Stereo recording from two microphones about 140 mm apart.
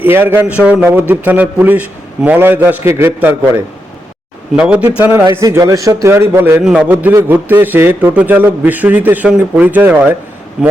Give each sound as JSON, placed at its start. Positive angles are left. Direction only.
{"t": 0.0, "sound": "a man's voice", "side_deg": -15}
{"t": 4.5, "sound": "a man's voice", "side_deg": -10}
{"t": 6.6, "sound": "a man's voice", "side_deg": -5}